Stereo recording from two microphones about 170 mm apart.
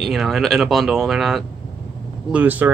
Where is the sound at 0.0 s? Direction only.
Centre (ahead or behind).